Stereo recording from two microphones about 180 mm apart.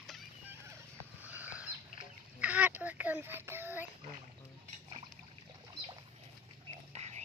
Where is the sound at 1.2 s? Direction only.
10° right (ahead or behind).